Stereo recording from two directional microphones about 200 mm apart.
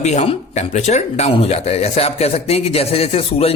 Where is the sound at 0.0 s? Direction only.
35° left (ahead or behind).